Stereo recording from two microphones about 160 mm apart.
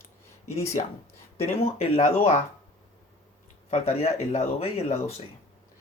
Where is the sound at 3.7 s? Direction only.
40° left (ahead or behind).